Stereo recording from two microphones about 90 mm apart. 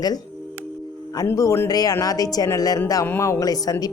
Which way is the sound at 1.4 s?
40° left (ahead or behind).